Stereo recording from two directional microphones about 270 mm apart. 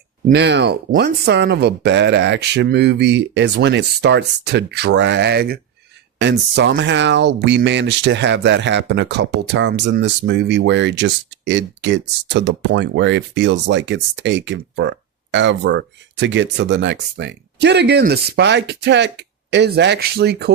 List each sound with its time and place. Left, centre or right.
0.3 s speech: right